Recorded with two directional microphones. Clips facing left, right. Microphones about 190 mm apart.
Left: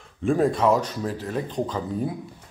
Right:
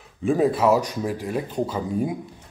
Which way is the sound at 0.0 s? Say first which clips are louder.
Right 1 dB; centre (ahead or behind).